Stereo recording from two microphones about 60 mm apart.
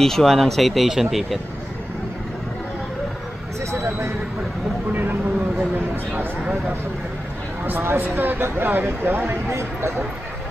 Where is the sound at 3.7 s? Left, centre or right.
Right.